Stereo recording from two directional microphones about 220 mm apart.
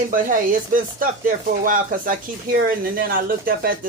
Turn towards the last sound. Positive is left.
turn(degrees=-40)  # may be behind; listen again after turning